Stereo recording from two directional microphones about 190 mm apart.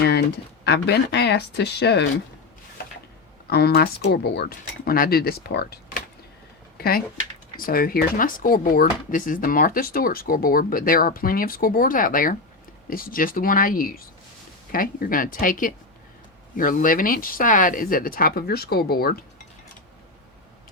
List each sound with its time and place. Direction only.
0.0 s speech: 60° left (ahead or behind)
3.4 s speech: 55° left (ahead or behind)